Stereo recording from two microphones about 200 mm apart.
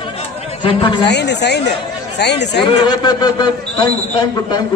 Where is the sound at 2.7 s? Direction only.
20° left (ahead or behind).